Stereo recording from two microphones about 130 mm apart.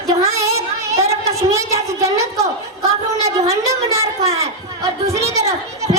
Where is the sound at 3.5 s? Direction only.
25° right (ahead or behind).